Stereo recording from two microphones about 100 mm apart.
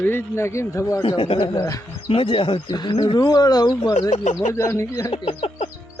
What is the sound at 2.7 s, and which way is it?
Speech, 45° left (ahead or behind).